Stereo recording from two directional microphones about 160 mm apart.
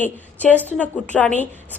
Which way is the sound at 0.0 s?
10° left (ahead or behind).